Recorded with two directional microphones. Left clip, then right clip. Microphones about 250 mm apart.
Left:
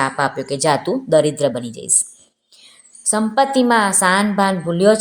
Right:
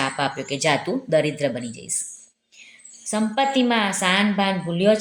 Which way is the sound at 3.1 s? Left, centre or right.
Left.